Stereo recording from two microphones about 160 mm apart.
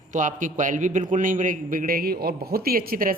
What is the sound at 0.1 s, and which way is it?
A man's voice, 55° right (ahead or behind).